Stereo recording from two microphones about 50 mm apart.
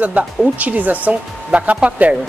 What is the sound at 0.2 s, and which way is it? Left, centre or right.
Speech, right.